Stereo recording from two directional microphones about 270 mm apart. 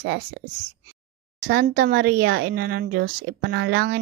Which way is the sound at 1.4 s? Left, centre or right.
Right.